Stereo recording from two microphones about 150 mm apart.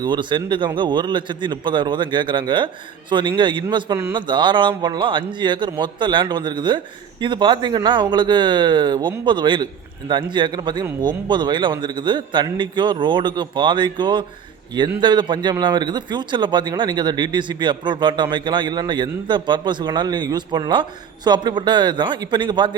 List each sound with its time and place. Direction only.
0.0 s a man's voice: 30° right (ahead or behind)